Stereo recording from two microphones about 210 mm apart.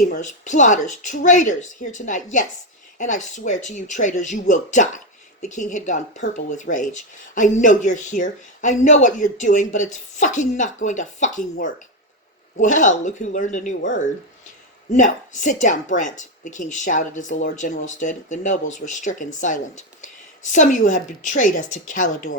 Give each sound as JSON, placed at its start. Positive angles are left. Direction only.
{"t": 0.0, "sound": "speech", "side_deg": 35}
{"t": 12.5, "sound": "speech", "side_deg": 35}